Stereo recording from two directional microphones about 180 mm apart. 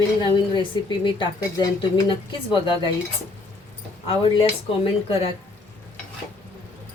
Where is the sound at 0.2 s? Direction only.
25° left (ahead or behind).